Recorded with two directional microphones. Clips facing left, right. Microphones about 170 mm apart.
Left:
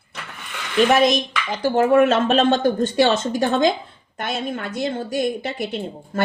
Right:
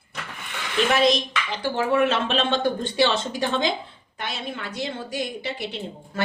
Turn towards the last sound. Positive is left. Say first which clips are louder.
# left 6 dB
turn(degrees=45)  # may be behind; listen again after turning